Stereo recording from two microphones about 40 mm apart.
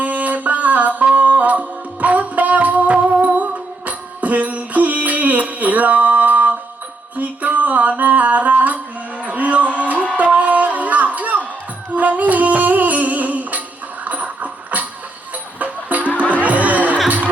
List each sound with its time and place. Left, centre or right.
0.0 s music: right